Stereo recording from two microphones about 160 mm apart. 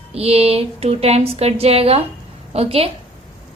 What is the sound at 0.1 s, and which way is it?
A woman's voice, 40° right (ahead or behind).